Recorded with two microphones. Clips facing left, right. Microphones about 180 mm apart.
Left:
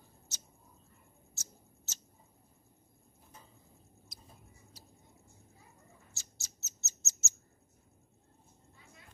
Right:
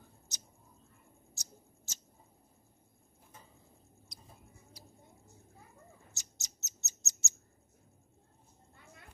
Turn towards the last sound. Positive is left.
turn(degrees=-15)  # may be behind; listen again after turning